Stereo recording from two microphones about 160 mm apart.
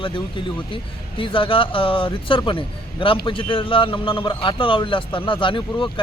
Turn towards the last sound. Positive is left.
turn(degrees=30)  # may be behind; listen again after turning